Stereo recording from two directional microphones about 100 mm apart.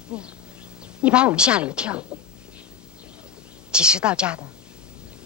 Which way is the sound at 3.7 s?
10° right (ahead or behind).